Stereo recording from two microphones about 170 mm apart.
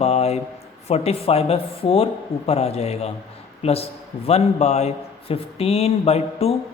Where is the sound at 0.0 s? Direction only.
35° left (ahead or behind).